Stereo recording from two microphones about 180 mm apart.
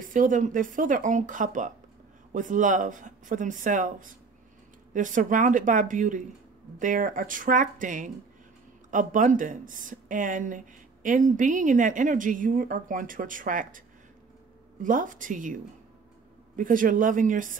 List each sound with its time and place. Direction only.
0.1 s speech: 45° right (ahead or behind)